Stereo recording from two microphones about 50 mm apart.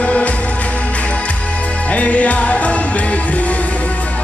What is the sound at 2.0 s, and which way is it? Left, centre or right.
Music, left.